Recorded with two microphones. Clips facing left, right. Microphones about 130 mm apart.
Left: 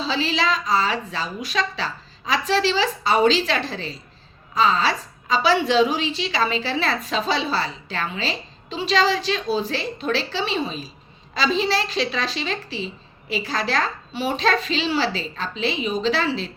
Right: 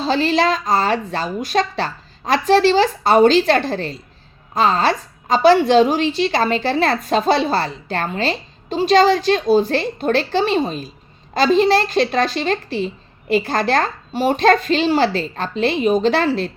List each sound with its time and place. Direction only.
0.0 s a woman's voice: 50° right (ahead or behind)